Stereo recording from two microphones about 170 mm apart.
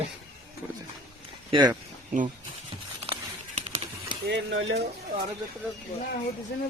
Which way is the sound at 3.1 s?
35° right (ahead or behind).